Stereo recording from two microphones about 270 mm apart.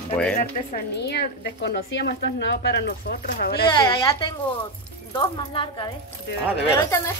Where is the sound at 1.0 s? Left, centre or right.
Left.